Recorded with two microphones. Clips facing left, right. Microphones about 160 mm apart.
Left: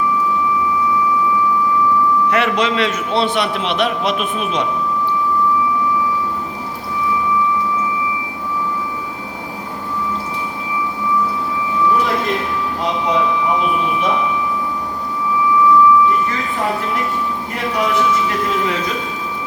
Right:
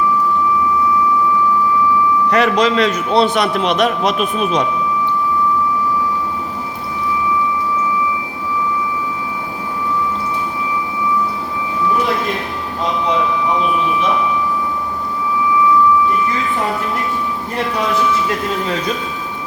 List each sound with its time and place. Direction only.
2.3 s a man's voice: 40° right (ahead or behind)